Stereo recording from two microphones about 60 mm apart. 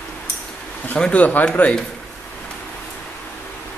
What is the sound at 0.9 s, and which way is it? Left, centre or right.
Speech, centre.